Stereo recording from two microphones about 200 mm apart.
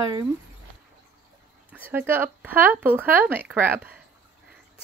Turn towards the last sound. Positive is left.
turn(degrees=-10)  # may be behind; listen again after turning